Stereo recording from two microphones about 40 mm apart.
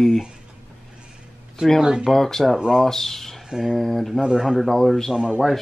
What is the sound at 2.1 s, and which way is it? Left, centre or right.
A man's voice, centre.